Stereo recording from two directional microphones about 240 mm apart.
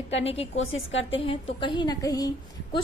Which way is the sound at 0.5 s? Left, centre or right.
Left.